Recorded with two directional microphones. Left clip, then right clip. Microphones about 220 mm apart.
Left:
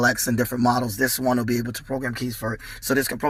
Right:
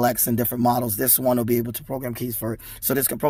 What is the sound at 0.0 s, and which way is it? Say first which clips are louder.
Speech: left 1 dB; 45° right (ahead or behind).